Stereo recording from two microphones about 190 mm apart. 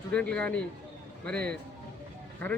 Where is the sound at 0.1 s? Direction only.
5° left (ahead or behind).